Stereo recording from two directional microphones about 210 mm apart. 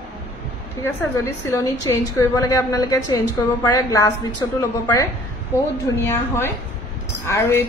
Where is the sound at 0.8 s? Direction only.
15° left (ahead or behind).